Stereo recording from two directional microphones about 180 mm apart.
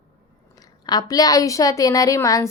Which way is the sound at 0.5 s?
20° left (ahead or behind).